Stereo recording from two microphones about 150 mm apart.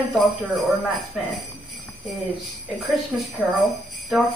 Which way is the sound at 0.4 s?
Centre (ahead or behind).